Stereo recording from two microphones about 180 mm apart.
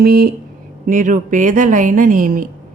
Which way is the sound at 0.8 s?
45° right (ahead or behind).